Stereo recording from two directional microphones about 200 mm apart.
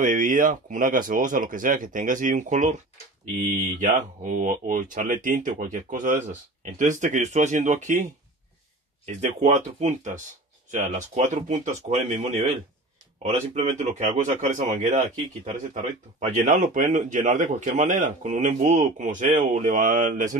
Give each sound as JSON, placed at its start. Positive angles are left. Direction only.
{"t": 0.0, "sound": "a man's voice", "side_deg": -40}
{"t": 3.8, "sound": "a man's voice", "side_deg": -40}